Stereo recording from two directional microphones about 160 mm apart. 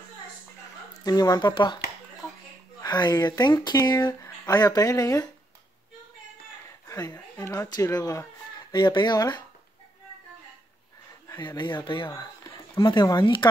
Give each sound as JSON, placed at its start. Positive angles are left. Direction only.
{"t": 0.9, "sound": "speech", "side_deg": 25}
{"t": 2.8, "sound": "speech", "side_deg": 25}
{"t": 6.9, "sound": "a woman's voice", "side_deg": 20}
{"t": 11.2, "sound": "speech", "side_deg": 30}